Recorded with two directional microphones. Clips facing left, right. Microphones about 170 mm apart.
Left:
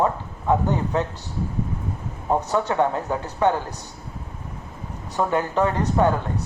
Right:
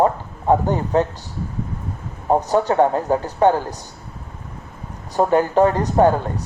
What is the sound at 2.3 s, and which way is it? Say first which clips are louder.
Speech: right 5 dB; 35° right (ahead or behind).